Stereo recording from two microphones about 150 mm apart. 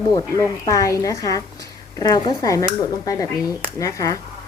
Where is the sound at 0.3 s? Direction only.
25° left (ahead or behind).